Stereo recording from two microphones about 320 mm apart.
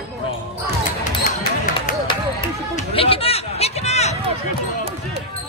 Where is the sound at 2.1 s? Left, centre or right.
Centre.